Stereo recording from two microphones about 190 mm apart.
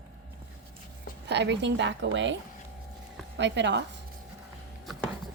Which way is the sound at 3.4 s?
65° right (ahead or behind).